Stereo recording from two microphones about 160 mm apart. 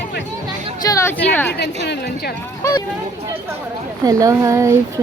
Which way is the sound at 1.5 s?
90° left.